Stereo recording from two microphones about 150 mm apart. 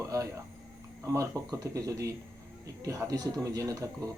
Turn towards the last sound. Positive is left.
turn(degrees=-20)  # may be behind; listen again after turning